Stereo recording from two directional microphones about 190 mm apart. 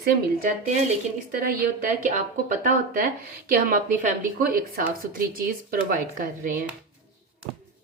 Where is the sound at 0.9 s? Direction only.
45° right (ahead or behind).